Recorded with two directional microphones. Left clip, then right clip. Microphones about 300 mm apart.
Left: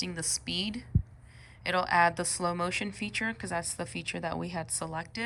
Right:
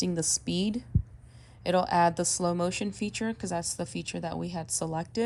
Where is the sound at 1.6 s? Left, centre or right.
Centre.